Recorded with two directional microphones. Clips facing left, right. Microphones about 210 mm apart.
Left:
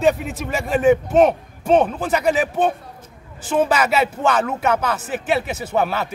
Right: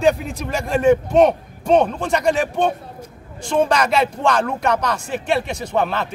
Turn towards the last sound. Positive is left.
turn(degrees=5)  # may be behind; listen again after turning